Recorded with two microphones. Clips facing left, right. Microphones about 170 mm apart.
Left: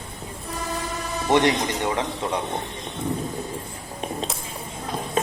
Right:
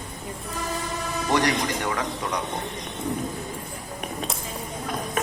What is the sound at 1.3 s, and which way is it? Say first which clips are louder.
A man's voice: left 4 dB; 25° left (ahead or behind).